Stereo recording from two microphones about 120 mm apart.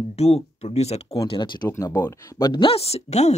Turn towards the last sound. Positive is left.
turn(degrees=65)  # may be behind; listen again after turning